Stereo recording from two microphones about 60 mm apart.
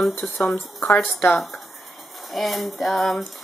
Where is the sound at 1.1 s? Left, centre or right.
Centre.